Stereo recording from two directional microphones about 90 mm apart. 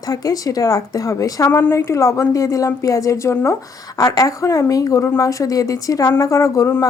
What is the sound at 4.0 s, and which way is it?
A woman's voice, 40° left (ahead or behind).